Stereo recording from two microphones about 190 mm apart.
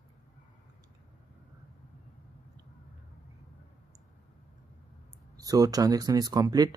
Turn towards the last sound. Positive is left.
turn(degrees=-20)  # may be behind; listen again after turning